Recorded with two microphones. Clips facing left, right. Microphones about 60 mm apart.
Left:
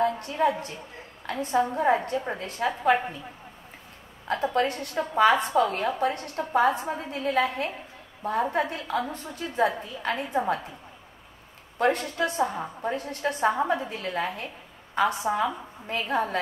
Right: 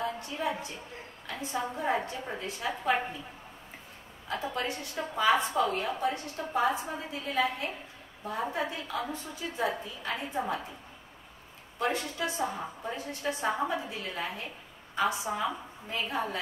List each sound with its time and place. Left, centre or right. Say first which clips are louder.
0.0 s a sound: left 10 dB; left
1.2 s a woman's voice: left 9 dB; left
4.3 s a woman's voice: left 8 dB; left
11.8 s a woman's voice: left 7 dB; left